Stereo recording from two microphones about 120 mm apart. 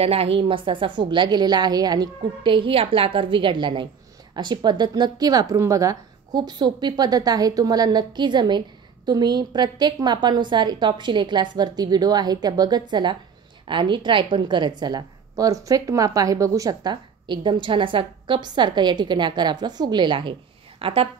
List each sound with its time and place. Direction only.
0.0 s a woman's voice: 55° right (ahead or behind)
20.8 s a woman's voice: 50° right (ahead or behind)